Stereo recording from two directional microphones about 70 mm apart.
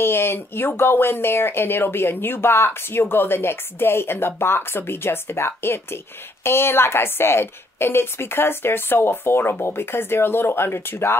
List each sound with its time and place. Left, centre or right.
0.0 s a woman's voice: left